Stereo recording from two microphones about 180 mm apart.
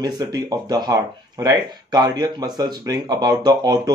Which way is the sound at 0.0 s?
20° right (ahead or behind).